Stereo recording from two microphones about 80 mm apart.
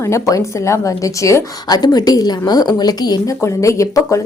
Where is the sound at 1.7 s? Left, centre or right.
Left.